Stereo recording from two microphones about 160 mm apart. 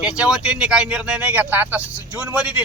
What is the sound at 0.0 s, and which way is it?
Speech, 5° right (ahead or behind).